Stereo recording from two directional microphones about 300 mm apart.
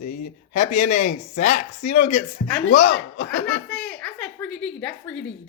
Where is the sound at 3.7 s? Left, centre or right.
Centre.